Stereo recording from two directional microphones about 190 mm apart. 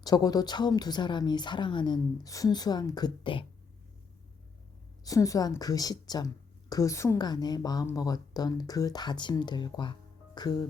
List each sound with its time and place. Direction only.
0.0 s speech: 20° left (ahead or behind)
5.0 s speech: 15° left (ahead or behind)